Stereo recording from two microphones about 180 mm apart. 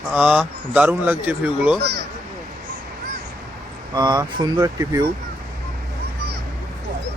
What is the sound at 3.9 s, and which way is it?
Speech, 25° right (ahead or behind).